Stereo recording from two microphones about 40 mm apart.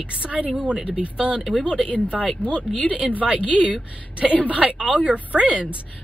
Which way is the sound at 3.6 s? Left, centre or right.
Centre.